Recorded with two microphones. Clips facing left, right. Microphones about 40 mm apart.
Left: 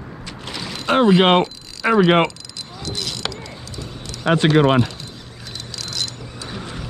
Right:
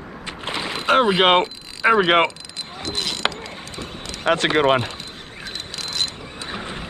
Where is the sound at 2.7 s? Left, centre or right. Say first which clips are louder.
Right 1 dB; right.